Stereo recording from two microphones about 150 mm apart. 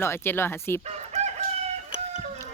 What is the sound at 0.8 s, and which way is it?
Chicken, 45° right (ahead or behind).